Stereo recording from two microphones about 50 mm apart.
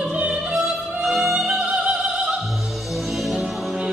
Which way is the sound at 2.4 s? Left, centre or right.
Centre.